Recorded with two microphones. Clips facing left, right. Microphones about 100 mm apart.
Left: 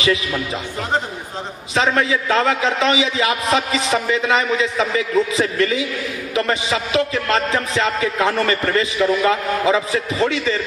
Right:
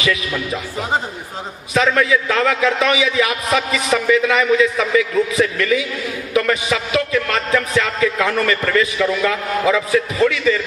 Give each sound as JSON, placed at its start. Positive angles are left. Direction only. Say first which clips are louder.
{"t": 1.7, "sound": "a man's voice", "louder": "right 2 dB", "side_deg": 30}